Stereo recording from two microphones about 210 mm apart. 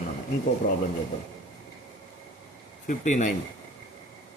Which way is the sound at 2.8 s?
35° left (ahead or behind).